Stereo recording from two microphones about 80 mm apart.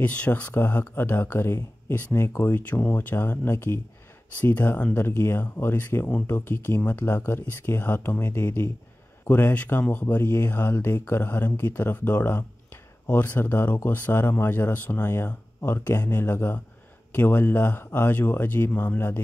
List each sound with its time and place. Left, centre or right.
0.0 s speech: centre; by 2.4 s left
2.4 s speech: left